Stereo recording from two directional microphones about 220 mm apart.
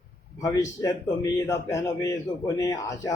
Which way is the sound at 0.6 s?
15° left (ahead or behind).